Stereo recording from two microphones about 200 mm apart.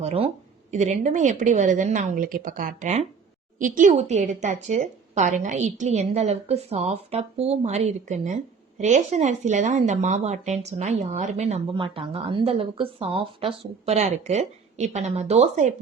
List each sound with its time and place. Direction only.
0.0 s a woman's voice: 30° right (ahead or behind)